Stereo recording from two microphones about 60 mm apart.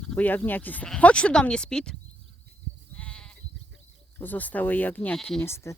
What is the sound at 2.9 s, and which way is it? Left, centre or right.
Sheep, centre.